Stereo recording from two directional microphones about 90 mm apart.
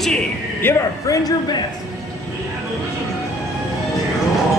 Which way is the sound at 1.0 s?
40° left (ahead or behind).